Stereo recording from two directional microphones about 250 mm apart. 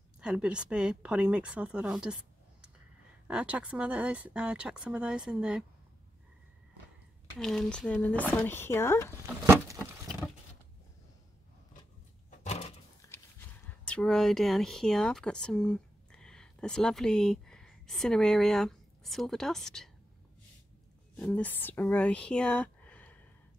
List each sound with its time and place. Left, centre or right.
0.2 s speech: centre
3.3 s speech: centre
7.3 s speech: centre
9.2 s a sound: centre
12.3 s a sound: left
13.8 s speech: centre
21.2 s speech: centre